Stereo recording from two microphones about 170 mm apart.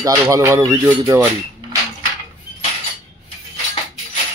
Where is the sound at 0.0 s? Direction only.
15° right (ahead or behind).